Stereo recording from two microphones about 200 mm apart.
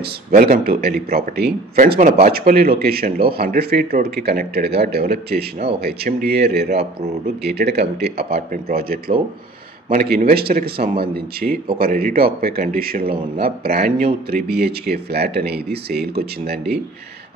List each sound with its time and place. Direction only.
0.3 s speech: 45° right (ahead or behind)